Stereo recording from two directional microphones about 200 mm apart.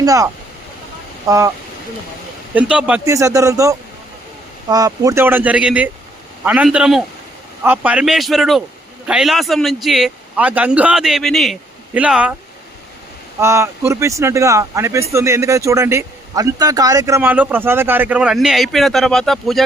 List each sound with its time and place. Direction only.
0.0 s speech: 15° right (ahead or behind)
1.3 s a man's voice: 15° right (ahead or behind)
2.6 s a man's voice: 5° right (ahead or behind)
13.4 s a man's voice: 15° right (ahead or behind)